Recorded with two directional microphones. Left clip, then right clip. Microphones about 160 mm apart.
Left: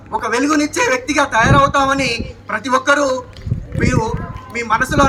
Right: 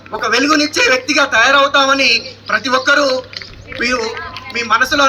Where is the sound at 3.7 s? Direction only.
35° left (ahead or behind).